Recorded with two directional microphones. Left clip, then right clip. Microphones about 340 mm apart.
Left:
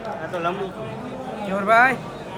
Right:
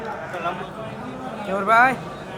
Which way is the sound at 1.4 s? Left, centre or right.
Centre.